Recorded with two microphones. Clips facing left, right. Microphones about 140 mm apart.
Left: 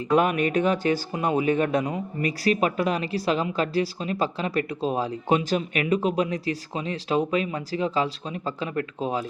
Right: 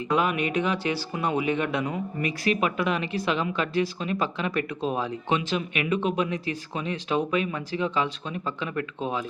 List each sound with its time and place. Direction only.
0.2 s speech: 45° left (ahead or behind)